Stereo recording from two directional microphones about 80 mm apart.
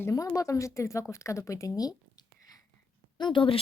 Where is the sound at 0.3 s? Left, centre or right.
Left.